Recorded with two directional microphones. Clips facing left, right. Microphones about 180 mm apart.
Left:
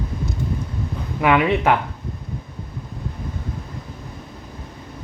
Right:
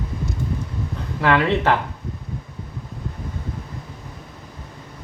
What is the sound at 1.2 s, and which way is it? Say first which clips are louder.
Speech: left 1 dB; 10° left (ahead or behind).